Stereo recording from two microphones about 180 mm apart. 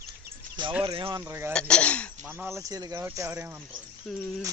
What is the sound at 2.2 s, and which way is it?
Speech, 10° right (ahead or behind).